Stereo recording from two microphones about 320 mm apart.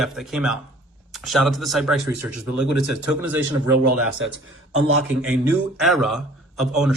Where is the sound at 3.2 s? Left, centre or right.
Centre.